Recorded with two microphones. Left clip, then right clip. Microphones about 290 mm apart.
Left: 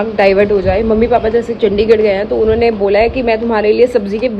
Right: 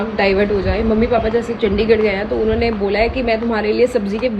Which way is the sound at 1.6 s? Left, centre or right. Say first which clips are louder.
Left 5 dB; left.